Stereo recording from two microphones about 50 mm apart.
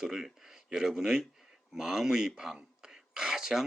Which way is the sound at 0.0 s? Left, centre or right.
Centre.